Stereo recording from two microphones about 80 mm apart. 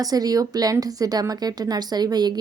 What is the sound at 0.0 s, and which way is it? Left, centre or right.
A woman's voice, right.